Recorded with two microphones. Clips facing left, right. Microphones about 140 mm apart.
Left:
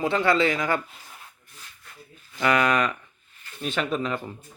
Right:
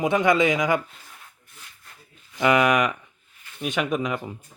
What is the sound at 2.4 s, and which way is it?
A man's voice, 20° right (ahead or behind).